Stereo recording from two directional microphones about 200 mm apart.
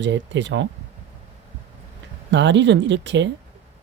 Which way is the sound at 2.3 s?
65° right (ahead or behind).